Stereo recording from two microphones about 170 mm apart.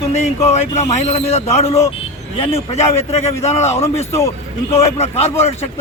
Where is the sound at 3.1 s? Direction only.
35° left (ahead or behind).